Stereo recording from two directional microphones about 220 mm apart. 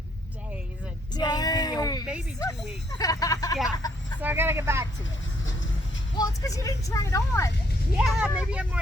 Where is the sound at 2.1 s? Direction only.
5° right (ahead or behind).